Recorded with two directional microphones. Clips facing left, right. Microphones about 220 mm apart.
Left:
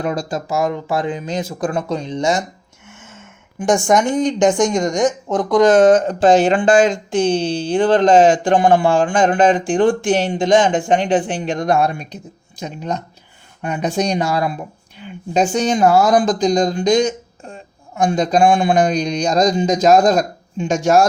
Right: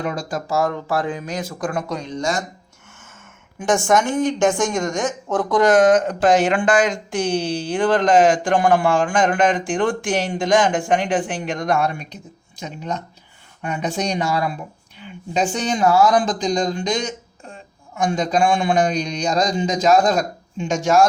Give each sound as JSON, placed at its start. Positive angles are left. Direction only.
{"t": 0.0, "sound": "speech", "side_deg": 40}
{"t": 0.3, "sound": "speech", "side_deg": 20}
{"t": 3.0, "sound": "gasp", "side_deg": 20}
{"t": 3.7, "sound": "a woman's voice", "side_deg": 15}
{"t": 5.7, "sound": "speech", "side_deg": 30}